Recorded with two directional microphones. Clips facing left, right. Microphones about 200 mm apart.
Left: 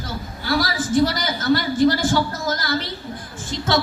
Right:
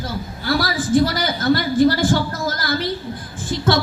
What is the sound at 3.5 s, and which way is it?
Music, 55° right (ahead or behind).